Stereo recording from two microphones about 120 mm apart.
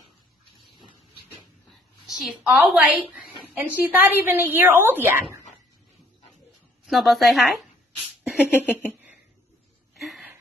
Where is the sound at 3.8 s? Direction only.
15° right (ahead or behind).